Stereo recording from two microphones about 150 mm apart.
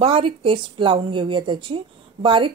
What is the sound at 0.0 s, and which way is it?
A woman's voice, 35° right (ahead or behind).